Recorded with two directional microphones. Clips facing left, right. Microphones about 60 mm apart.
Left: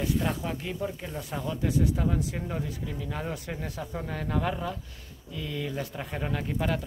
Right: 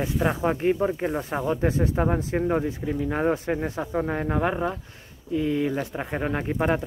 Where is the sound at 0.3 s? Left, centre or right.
Right.